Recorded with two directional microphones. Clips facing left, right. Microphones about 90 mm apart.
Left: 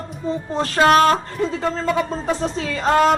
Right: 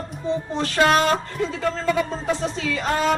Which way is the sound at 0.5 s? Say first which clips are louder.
Left 3 dB; 40° left (ahead or behind).